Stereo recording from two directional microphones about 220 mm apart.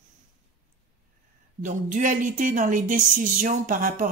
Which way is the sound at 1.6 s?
35° right (ahead or behind).